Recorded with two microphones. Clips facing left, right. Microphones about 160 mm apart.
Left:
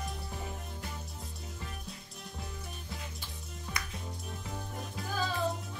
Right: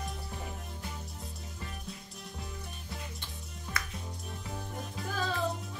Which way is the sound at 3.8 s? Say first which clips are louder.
Right 3 dB; 20° left (ahead or behind).